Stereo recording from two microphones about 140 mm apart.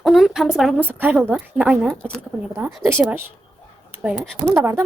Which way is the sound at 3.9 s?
15° right (ahead or behind).